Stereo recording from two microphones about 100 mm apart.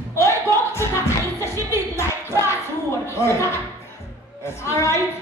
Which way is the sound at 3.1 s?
25° left (ahead or behind).